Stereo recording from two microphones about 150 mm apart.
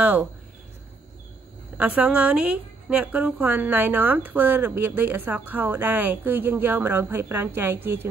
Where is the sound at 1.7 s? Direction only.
10° right (ahead or behind).